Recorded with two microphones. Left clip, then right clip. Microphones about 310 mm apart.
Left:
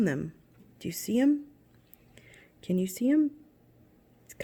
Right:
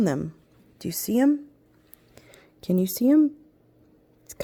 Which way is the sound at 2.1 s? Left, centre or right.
Right.